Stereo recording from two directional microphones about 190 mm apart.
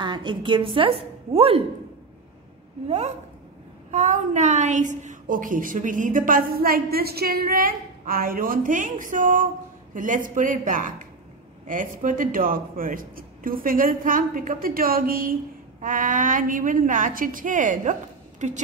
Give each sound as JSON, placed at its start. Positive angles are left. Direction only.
{"t": 0.0, "sound": "a woman's voice", "side_deg": -25}
{"t": 3.9, "sound": "a woman's voice", "side_deg": -40}